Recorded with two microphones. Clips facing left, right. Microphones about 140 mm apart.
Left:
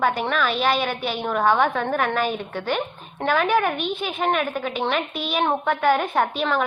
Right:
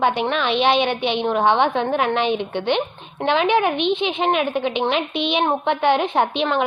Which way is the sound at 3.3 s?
20° right (ahead or behind).